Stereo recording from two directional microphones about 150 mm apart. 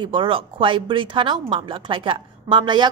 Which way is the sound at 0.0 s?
35° right (ahead or behind).